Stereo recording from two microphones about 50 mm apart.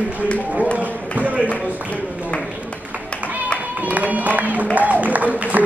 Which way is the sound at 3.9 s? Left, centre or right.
Right.